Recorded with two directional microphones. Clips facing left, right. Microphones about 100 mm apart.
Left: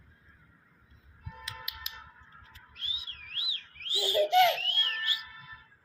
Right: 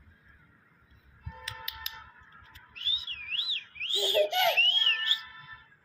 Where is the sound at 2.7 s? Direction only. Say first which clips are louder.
Right 3 dB; 5° left (ahead or behind).